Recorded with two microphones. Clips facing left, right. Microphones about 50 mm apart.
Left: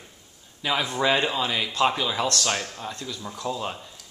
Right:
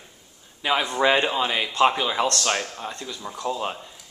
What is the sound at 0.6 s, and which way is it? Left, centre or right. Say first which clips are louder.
Speech: right 3 dB; centre.